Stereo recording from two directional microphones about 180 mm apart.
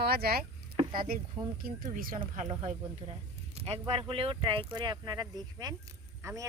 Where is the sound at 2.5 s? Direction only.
35° right (ahead or behind).